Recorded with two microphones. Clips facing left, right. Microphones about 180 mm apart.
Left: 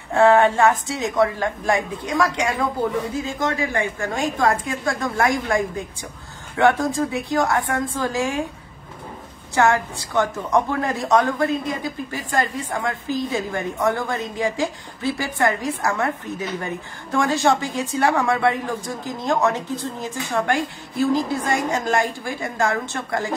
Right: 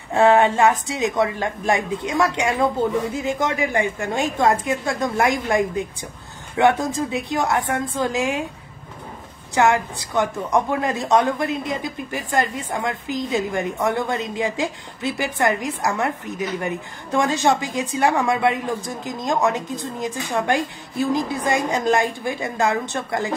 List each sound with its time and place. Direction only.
0.1 s a woman's voice: 20° right (ahead or behind)
9.6 s a woman's voice: 20° right (ahead or behind)